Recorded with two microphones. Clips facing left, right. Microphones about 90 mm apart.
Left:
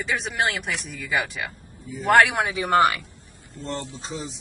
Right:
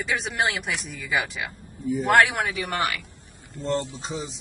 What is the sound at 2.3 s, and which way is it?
Speech, 20° left (ahead or behind).